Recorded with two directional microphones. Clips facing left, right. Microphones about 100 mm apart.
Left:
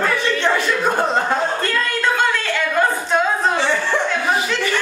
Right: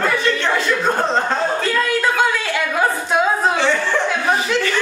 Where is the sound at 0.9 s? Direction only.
15° left (ahead or behind).